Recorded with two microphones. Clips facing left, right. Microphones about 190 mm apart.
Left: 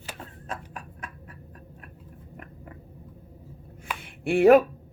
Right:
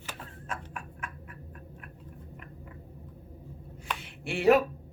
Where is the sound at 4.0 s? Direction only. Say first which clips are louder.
Left 14 dB; 50° left (ahead or behind).